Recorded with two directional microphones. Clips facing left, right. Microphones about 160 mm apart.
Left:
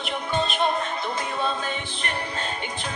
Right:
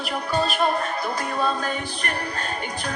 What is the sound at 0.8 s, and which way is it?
Music, 45° right (ahead or behind).